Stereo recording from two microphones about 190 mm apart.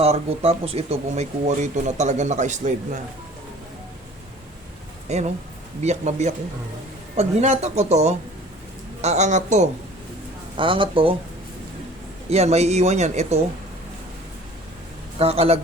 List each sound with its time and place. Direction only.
0.0 s speech: 30° right (ahead or behind)
5.0 s speech: 35° right (ahead or behind)
10.6 s speech: 25° right (ahead or behind)
12.3 s speech: 35° right (ahead or behind)
15.2 s speech: 30° right (ahead or behind)